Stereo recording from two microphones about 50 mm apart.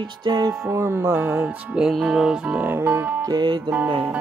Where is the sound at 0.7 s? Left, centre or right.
Right.